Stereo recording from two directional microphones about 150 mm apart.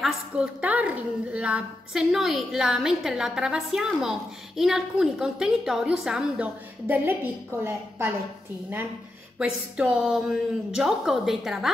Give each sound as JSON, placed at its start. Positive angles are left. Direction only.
{"t": 0.0, "sound": "a woman's voice", "side_deg": -10}
{"t": 9.4, "sound": "a woman's voice", "side_deg": -5}